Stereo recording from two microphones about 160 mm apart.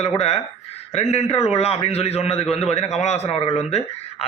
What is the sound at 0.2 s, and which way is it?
Speech, 40° left (ahead or behind).